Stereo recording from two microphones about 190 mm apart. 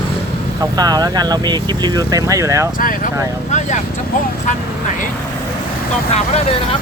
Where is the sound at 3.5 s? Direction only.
40° left (ahead or behind).